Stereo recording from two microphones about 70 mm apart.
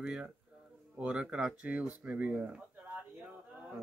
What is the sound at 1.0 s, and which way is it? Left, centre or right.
Speech, centre.